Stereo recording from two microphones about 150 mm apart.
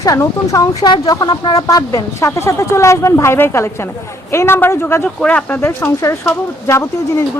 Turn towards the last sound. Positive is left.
turn(degrees=20)  # may be behind; listen again after turning